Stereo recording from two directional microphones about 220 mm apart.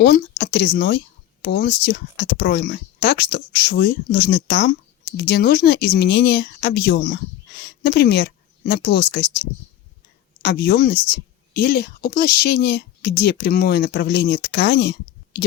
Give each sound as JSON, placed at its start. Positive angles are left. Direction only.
{"t": 0.0, "sound": "speech", "side_deg": 50}
{"t": 10.4, "sound": "speech", "side_deg": 50}